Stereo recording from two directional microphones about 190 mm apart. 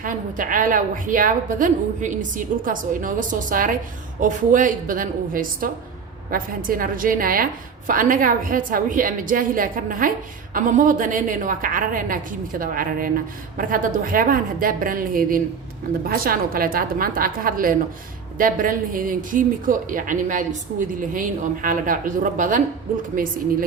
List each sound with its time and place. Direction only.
0.0 s a woman's voice: 45° right (ahead or behind)